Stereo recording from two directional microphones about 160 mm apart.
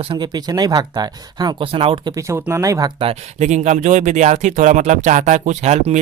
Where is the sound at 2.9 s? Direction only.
40° right (ahead or behind).